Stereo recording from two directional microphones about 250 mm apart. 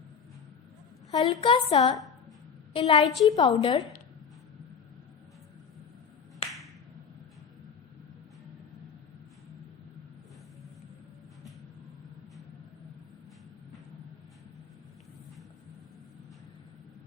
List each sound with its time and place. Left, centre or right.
1.1 s a woman's voice: centre